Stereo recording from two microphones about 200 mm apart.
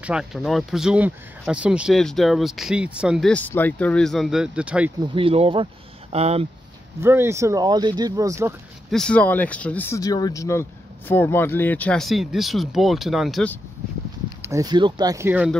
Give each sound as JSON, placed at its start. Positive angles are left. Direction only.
{"t": 0.0, "sound": "speech", "side_deg": -5}
{"t": 5.1, "sound": "speech", "side_deg": -30}
{"t": 7.0, "sound": "speech", "side_deg": -10}
{"t": 8.9, "sound": "speech", "side_deg": 5}
{"t": 14.4, "sound": "speech", "side_deg": -15}